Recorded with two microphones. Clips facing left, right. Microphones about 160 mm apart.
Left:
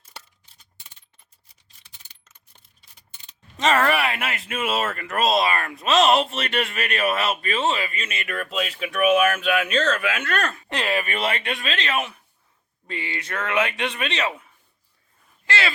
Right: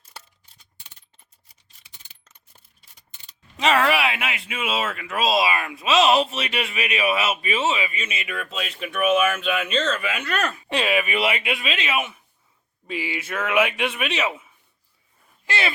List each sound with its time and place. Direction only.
3.6 s speech: centre (ahead or behind)
15.4 s speech: 15° right (ahead or behind)